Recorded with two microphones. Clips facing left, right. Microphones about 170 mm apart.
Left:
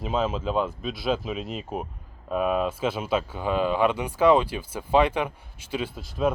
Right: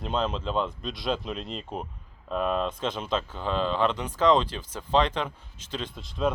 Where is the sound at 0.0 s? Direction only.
5° left (ahead or behind).